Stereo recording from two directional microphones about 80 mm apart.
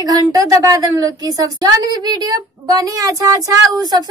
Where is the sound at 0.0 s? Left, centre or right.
Right.